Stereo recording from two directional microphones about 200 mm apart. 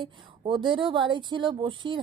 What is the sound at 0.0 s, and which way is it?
A woman's voice, 25° right (ahead or behind).